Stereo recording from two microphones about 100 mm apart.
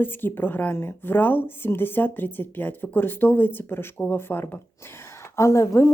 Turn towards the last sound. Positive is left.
turn(degrees=30)  # may be behind; listen again after turning